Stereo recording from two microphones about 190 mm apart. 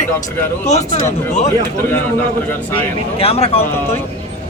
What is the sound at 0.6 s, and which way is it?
Speech, 35° left (ahead or behind).